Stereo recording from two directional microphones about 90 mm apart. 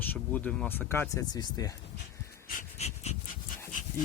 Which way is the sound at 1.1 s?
45° left (ahead or behind).